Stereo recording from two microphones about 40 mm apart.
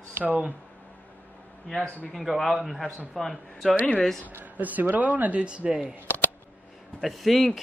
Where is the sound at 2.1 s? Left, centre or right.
Centre.